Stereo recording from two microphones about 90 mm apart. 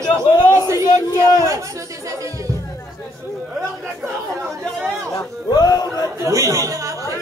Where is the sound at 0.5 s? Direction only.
35° right (ahead or behind).